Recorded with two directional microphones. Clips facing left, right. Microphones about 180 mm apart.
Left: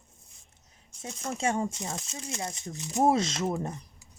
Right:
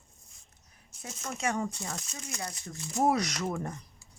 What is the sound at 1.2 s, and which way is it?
Speech, 30° left (ahead or behind).